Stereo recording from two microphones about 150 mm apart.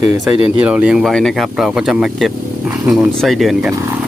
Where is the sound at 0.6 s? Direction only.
5° right (ahead or behind).